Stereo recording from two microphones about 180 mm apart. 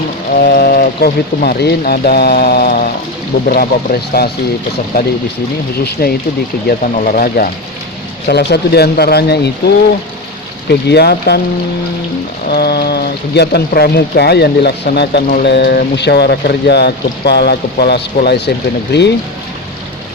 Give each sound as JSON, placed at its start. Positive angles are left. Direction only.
{"t": 0.3, "sound": "speech", "side_deg": 55}
{"t": 8.3, "sound": "speech", "side_deg": 65}
{"t": 12.5, "sound": "speech", "side_deg": 60}